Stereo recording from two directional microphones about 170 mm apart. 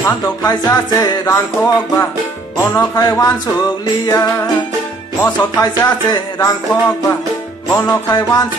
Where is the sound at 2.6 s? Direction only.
15° left (ahead or behind).